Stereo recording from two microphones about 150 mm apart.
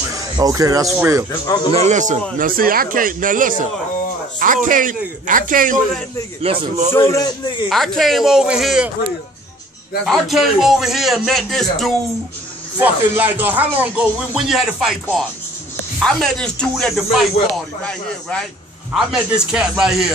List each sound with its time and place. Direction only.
0.1 s speech: 20° right (ahead or behind)
1.4 s speech: 30° left (ahead or behind)
1.7 s speech: 45° right (ahead or behind)
2.3 s a man's voice: 70° right (ahead or behind)
6.4 s a man's voice: 40° right (ahead or behind)
6.9 s a man's voice: 20° left (ahead or behind)
7.7 s a man's voice: centre (ahead or behind)
10.0 s a man's voice: centre (ahead or behind)
12.7 s a man's voice: 10° right (ahead or behind)
18.9 s a man's voice: 5° right (ahead or behind)